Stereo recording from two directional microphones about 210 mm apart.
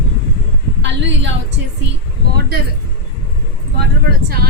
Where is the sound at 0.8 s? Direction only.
60° right (ahead or behind).